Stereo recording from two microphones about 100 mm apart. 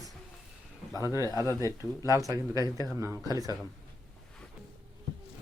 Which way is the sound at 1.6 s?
30° right (ahead or behind).